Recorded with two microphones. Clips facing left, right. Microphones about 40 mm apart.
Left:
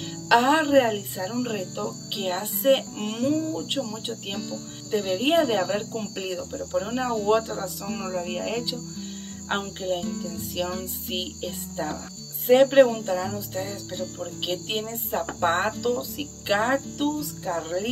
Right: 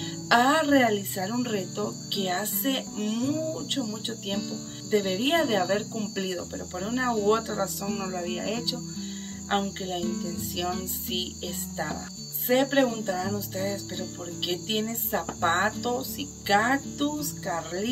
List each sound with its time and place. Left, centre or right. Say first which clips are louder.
0.3 s music: left 2 dB; centre
3.0 s speech: left 2 dB; left
3.3 s music: left 2 dB; centre
7.6 s cricket: right 1 dB; centre
9.5 s music: left 1 dB; centre
12.4 s cricket: left 6 dB; centre
14.8 s music: left 1 dB; centre
16.4 s cricket: even; centre